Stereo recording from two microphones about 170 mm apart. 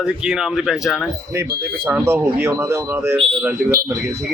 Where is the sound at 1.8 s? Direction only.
15° right (ahead or behind).